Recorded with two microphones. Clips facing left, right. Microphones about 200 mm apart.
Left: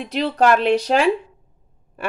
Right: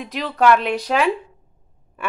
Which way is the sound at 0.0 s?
30° left (ahead or behind).